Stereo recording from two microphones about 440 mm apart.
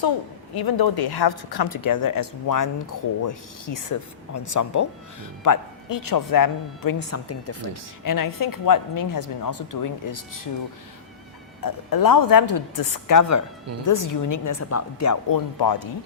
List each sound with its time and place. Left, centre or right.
0.5 s speech: left
11.6 s speech: left
15.5 s speech: left